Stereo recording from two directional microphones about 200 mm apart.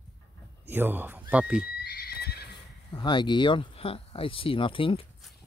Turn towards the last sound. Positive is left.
turn(degrees=25)  # may be behind; listen again after turning